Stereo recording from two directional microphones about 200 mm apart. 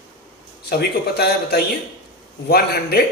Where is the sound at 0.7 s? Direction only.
55° left (ahead or behind).